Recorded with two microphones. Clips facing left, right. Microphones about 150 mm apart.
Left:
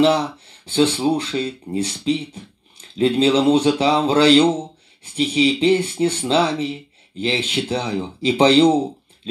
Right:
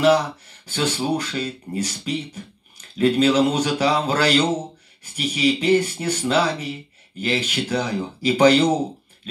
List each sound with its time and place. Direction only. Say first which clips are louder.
0.0 s speech: left 1 dB; 25° left (ahead or behind)